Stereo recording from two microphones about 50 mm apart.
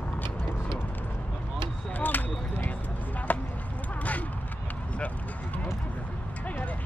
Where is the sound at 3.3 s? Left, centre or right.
Left.